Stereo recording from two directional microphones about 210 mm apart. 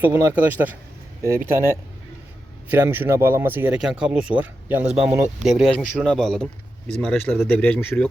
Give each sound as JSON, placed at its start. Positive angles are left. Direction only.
{"t": 0.0, "sound": "speech", "side_deg": -10}